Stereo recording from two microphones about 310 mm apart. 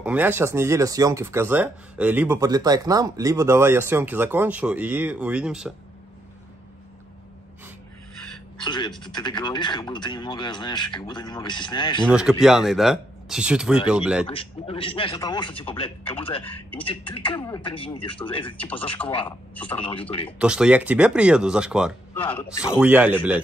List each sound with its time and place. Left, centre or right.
0.0 s speech: centre
8.6 s speech: centre
12.1 s speech: centre
14.2 s speech: centre
16.4 s speech: centre
18.6 s speech: centre